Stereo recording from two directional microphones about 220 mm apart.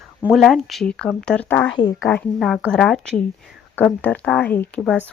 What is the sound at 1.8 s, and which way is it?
Speech, 20° left (ahead or behind).